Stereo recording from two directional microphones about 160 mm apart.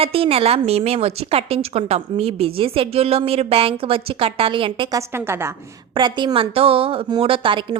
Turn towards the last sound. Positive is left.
turn(degrees=-30)  # may be behind; listen again after turning